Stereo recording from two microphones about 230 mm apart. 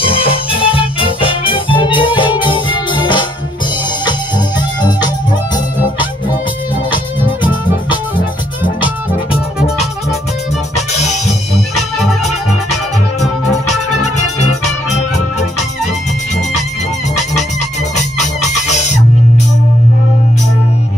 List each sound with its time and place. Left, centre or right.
0.0 s music: left
8.8 s music: left
11.0 s music: left
13.7 s music: left